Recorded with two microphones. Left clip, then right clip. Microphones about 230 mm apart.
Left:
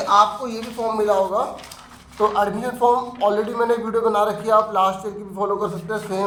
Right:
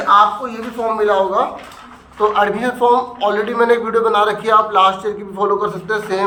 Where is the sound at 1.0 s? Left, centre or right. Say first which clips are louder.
Right 4 dB; left.